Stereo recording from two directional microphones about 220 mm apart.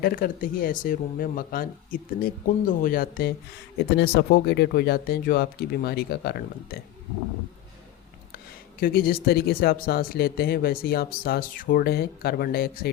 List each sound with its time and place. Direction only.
0.0 s speech: 40° left (ahead or behind)
8.8 s speech: 40° left (ahead or behind)